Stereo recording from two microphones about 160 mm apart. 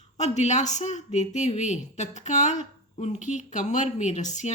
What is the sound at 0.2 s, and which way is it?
Speech, 45° left (ahead or behind).